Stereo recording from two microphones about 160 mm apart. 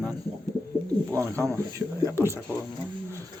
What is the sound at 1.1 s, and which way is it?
Speech, 20° right (ahead or behind).